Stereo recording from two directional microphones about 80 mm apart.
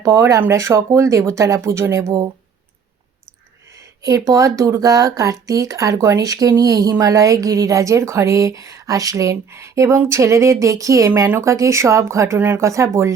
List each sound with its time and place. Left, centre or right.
0.0 s speech: right
4.3 s speech: right
12.4 s speech: right
12.6 s speech: right